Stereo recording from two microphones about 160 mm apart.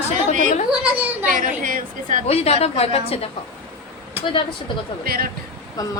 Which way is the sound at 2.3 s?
40° left (ahead or behind).